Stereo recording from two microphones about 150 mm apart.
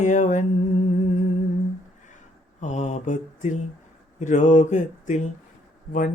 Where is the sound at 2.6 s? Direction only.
50° left (ahead or behind).